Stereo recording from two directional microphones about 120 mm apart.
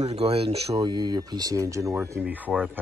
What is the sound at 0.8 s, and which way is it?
Speech, 40° right (ahead or behind).